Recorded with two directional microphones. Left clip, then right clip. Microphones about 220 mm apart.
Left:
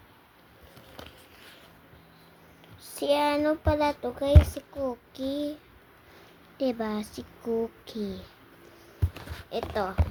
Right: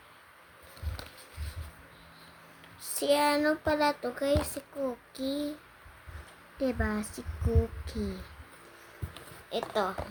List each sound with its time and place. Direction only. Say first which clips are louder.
2.8 s a child's voice: left 1 dB; 20° right (ahead or behind)
6.6 s a child's voice: left 2 dB; 20° right (ahead or behind)
9.5 s speech: even; 15° right (ahead or behind)